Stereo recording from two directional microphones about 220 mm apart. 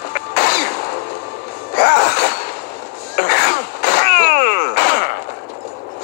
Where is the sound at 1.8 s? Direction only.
45° left (ahead or behind).